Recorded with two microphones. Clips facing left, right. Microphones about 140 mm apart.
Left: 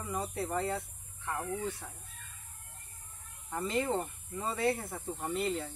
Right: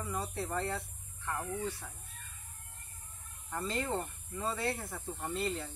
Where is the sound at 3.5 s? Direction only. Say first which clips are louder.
Left 3 dB; 15° left (ahead or behind).